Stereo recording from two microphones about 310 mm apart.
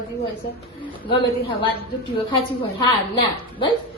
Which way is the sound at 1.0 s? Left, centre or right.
Centre.